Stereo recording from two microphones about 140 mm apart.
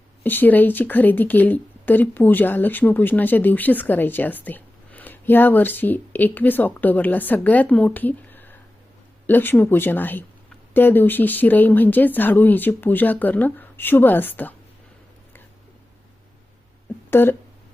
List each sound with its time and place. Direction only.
0.2 s a woman's voice: 15° left (ahead or behind)
17.1 s speech: 15° left (ahead or behind)